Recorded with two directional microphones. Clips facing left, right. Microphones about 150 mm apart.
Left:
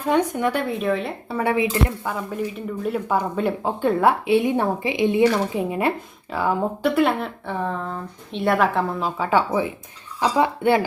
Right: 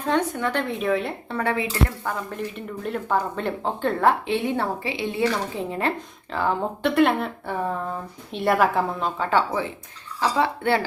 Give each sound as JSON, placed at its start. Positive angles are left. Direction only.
{"t": 0.0, "sound": "speech", "side_deg": 10}